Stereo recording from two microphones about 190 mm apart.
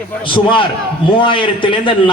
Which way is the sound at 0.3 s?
25° left (ahead or behind).